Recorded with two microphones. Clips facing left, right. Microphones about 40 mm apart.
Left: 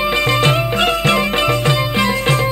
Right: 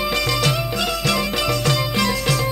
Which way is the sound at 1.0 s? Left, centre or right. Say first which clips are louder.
Left 6 dB; left.